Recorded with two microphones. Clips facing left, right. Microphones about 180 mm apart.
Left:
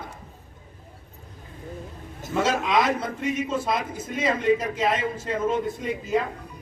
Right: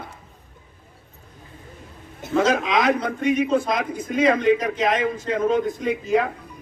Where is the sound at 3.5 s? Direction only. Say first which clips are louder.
Right 5 dB; 5° left (ahead or behind).